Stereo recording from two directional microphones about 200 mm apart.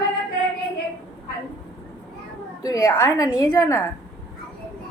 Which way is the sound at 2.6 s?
15° left (ahead or behind).